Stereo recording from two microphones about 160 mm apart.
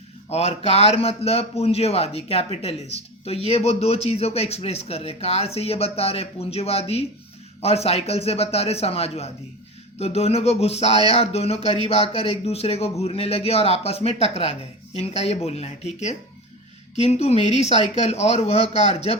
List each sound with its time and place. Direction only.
0.3 s speech: 40° left (ahead or behind)